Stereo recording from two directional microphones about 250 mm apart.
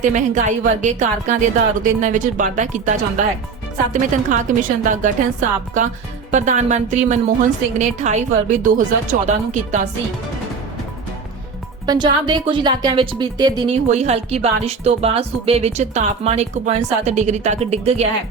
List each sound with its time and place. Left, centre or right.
0.0 s a woman's voice: right
11.9 s speech: centre
13.8 s speech: right